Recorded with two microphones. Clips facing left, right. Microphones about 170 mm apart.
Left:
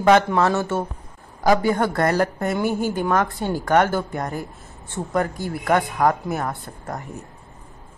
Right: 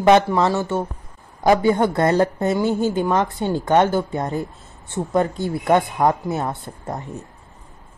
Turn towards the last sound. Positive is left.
turn(degrees=-25)  # may be behind; listen again after turning